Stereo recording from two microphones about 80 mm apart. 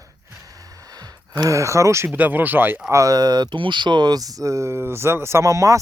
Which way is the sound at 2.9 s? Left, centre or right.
Right.